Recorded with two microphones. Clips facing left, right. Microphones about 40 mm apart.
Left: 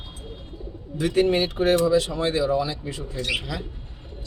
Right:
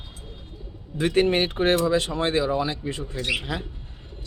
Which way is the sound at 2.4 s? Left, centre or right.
Right.